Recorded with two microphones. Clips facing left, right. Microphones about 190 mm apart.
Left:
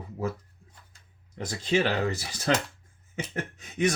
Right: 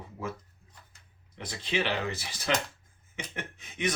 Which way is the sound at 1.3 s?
45° left (ahead or behind).